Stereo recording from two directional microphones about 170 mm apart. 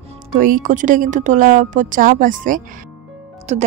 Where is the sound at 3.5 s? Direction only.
40° right (ahead or behind).